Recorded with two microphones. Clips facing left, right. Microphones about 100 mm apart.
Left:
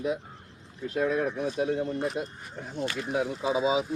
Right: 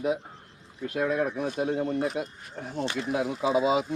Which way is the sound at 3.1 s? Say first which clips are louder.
Right 2 dB; 70° right (ahead or behind).